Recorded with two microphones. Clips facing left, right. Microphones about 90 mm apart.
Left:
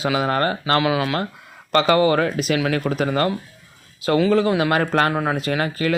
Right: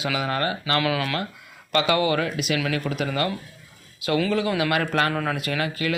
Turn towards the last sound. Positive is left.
turn(degrees=35)  # may be behind; listen again after turning